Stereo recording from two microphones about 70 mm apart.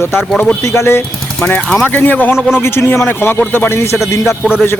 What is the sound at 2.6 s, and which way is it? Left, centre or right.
Speech, left.